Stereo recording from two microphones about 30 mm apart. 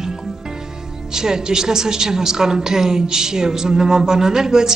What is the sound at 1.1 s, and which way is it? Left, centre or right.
A woman's voice, right.